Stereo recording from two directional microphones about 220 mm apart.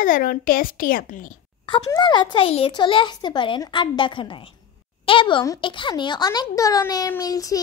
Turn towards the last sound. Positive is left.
turn(degrees=15)  # may be behind; listen again after turning